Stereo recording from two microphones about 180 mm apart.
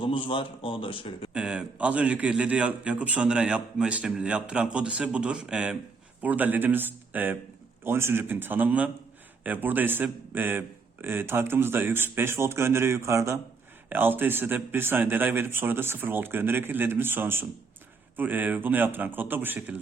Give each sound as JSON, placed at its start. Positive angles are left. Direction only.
{"t": 0.0, "sound": "a man's voice", "side_deg": 30}
{"t": 1.3, "sound": "a man's voice", "side_deg": -5}